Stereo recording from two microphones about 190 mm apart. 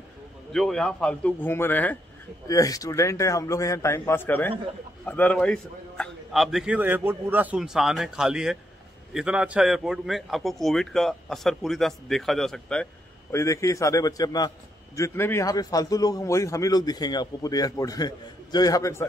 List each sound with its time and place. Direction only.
0.5 s a man's voice: 5° left (ahead or behind)
13.3 s a man's voice: 15° left (ahead or behind)